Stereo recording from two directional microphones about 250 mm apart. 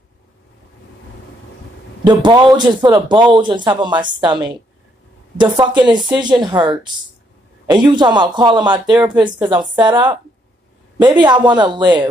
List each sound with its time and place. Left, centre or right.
2.0 s a man's voice: centre
11.1 s a man's voice: centre